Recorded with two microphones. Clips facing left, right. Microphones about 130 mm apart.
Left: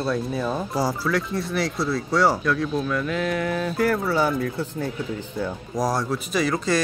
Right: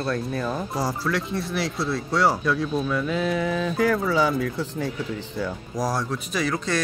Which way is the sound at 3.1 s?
20° right (ahead or behind).